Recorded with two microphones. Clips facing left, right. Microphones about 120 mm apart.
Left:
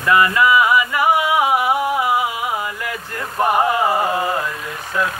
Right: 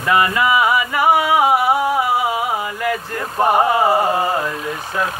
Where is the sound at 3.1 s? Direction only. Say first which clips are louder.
Right 1 dB; 30° right (ahead or behind).